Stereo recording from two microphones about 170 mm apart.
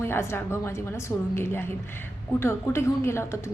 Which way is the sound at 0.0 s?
15° left (ahead or behind).